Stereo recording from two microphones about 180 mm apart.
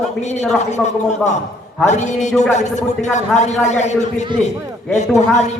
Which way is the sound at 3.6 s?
40° left (ahead or behind).